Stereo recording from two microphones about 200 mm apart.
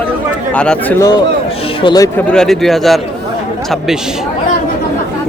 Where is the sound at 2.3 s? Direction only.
Centre (ahead or behind).